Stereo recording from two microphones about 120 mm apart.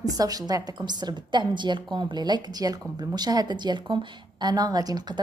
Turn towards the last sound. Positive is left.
turn(degrees=-35)  # may be behind; listen again after turning